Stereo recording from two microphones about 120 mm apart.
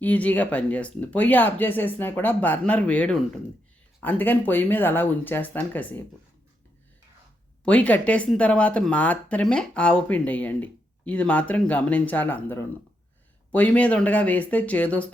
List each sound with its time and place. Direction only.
0.0 s speech: 15° left (ahead or behind)
7.6 s speech: 10° left (ahead or behind)